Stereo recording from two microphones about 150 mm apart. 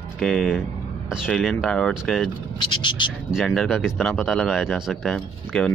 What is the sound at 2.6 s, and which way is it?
Speech, 30° left (ahead or behind).